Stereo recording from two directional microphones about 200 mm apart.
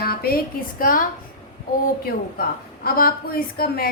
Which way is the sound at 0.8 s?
45° left (ahead or behind).